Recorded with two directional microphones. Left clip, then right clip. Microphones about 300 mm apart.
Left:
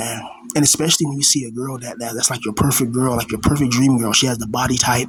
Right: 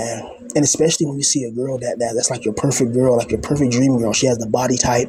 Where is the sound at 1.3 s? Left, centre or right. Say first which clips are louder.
Right 4 dB; centre.